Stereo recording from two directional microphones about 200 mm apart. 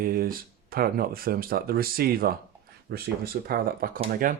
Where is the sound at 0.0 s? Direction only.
45° right (ahead or behind).